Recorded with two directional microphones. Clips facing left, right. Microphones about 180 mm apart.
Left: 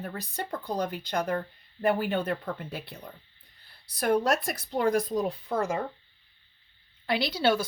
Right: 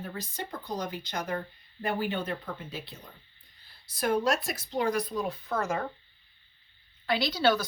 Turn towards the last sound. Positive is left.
turn(degrees=25)  # may be behind; listen again after turning